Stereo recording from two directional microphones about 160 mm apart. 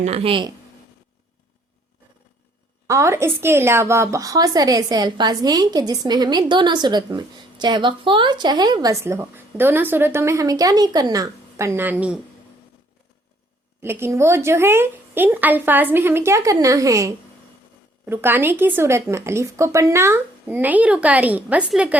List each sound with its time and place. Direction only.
0.0 s speech: 40° right (ahead or behind)
2.8 s a woman's voice: 20° right (ahead or behind)
13.8 s speech: 15° right (ahead or behind)